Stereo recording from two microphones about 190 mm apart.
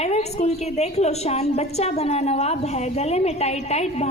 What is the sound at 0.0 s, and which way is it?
A woman's voice, 35° left (ahead or behind).